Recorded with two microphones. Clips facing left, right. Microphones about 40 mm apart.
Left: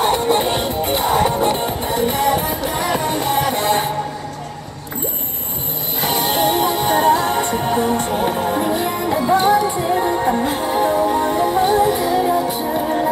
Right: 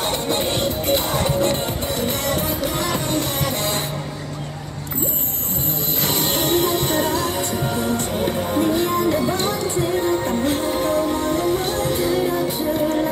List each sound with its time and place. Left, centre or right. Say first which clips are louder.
0.0 s music: left 6 dB; centre
5.9 s music: left 5 dB; centre; by 8.2 s left
8.2 s music: left 2 dB; centre